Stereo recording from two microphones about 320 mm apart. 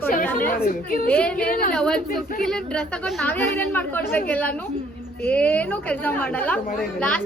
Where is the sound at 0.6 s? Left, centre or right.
Left.